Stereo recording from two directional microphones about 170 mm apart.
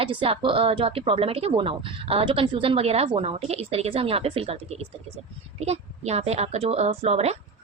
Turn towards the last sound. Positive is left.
turn(degrees=-40)  # may be behind; listen again after turning